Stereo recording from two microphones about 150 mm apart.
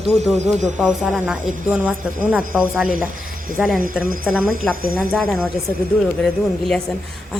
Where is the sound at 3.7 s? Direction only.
65° right (ahead or behind).